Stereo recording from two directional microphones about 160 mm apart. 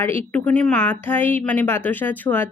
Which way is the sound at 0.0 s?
10° left (ahead or behind).